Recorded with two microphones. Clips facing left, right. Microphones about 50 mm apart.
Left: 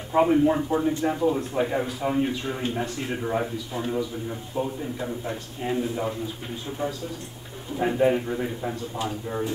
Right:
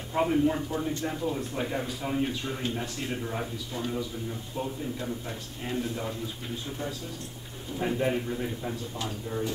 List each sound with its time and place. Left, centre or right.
0.1 s a man's voice: centre